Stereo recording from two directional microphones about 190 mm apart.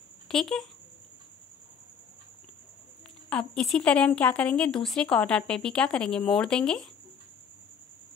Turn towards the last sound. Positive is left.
turn(degrees=5)  # may be behind; listen again after turning